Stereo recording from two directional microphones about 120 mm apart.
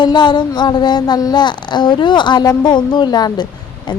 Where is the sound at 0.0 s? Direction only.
40° left (ahead or behind).